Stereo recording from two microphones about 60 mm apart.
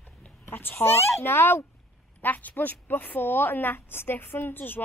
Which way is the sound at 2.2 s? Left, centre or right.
Left.